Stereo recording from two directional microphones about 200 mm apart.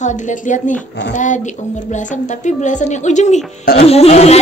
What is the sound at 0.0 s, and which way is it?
A woman's voice, 40° left (ahead or behind).